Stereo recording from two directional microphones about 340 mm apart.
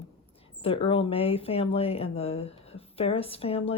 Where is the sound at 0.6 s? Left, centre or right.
Centre.